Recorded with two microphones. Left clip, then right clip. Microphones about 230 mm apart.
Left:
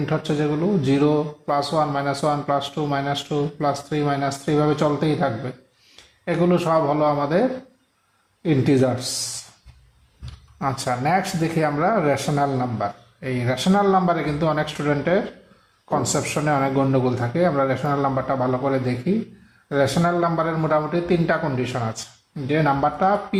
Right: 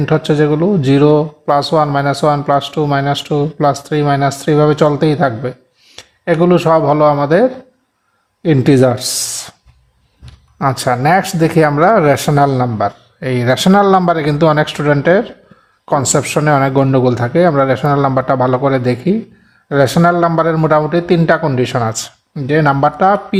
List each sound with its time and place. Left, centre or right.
0.0 s speech: right
8.4 s speech: right
10.6 s speech: right